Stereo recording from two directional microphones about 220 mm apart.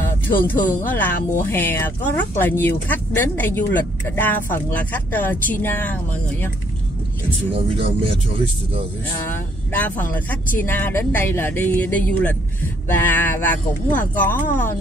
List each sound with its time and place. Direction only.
0.5 s speech: 10° left (ahead or behind)
7.5 s speech: 25° right (ahead or behind)
9.3 s speech: 10° left (ahead or behind)